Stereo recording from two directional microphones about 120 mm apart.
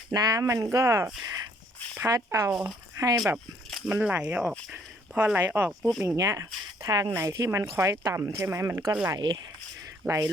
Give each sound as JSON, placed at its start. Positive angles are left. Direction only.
{"t": 0.1, "sound": "speech", "side_deg": -30}
{"t": 2.5, "sound": "speech", "side_deg": 0}
{"t": 3.0, "sound": "speech", "side_deg": -30}
{"t": 3.3, "sound": "a sound", "side_deg": -5}
{"t": 3.9, "sound": "speech", "side_deg": -10}
{"t": 6.1, "sound": "speech", "side_deg": -25}
{"t": 9.0, "sound": "speech", "side_deg": -40}